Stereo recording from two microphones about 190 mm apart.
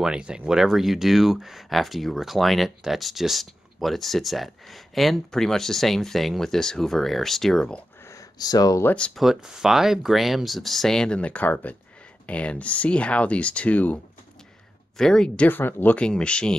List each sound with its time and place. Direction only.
0.0 s speech: 5° right (ahead or behind)
8.1 s speech: 20° left (ahead or behind)
8.9 s speech: 5° left (ahead or behind)